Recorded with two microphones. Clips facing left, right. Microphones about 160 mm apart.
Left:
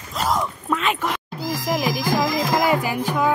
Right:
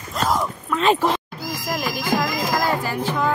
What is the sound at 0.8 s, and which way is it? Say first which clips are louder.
Speech: right 11 dB; 30° right (ahead or behind).